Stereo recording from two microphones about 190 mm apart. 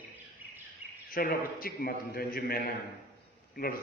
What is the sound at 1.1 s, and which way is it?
A man's voice, 50° left (ahead or behind).